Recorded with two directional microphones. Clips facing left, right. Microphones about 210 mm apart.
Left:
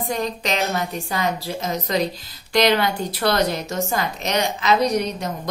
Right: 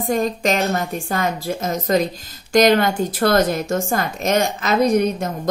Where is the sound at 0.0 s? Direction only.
45° right (ahead or behind).